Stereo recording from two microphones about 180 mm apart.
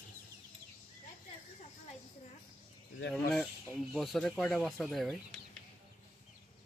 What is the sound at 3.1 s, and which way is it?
Speech, centre (ahead or behind).